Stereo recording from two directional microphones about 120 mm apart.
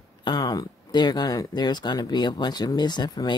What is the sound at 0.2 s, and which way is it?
Speech, 35° left (ahead or behind).